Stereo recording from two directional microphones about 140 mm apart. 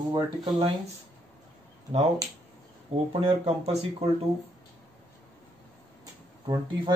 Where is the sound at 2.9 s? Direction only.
45° right (ahead or behind).